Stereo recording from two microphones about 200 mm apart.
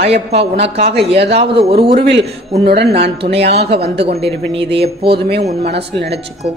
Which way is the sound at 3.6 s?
55° right (ahead or behind).